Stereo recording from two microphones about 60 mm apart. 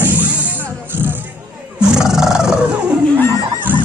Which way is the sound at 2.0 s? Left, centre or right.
Centre.